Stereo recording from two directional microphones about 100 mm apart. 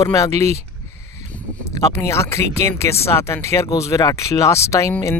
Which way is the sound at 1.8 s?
30° left (ahead or behind).